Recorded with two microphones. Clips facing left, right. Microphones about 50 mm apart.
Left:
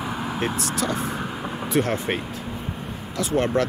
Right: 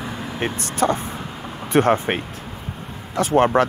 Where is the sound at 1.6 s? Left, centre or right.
Right.